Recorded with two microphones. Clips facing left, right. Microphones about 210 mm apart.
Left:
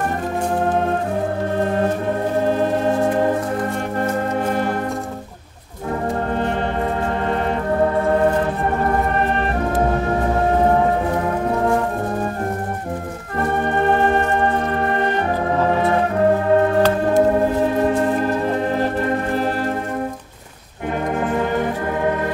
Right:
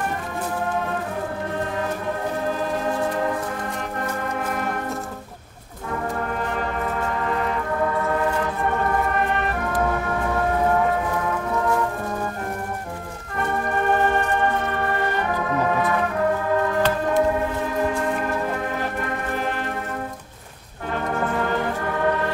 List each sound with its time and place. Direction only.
2.4 s music: 30° left (ahead or behind)
7.2 s music: 35° left (ahead or behind)
13.4 s organ: 30° left (ahead or behind)
16.5 s music: 30° left (ahead or behind)
21.3 s music: 15° left (ahead or behind)